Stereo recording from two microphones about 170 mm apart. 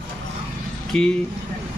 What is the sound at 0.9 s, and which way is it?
Speech, 5° left (ahead or behind).